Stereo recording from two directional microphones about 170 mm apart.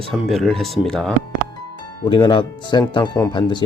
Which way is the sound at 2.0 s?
25° left (ahead or behind).